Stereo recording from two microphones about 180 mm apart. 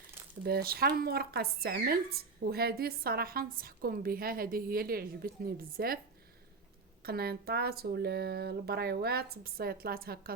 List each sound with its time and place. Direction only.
0.4 s speech: 60° right (ahead or behind)
7.0 s speech: 60° right (ahead or behind)